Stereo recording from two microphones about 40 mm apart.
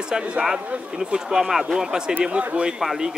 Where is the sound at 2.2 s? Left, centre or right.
Right.